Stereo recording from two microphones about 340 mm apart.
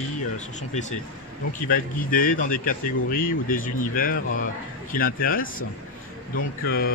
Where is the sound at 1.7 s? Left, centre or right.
Left.